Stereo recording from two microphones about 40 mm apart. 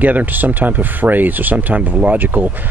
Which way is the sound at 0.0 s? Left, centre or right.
Right.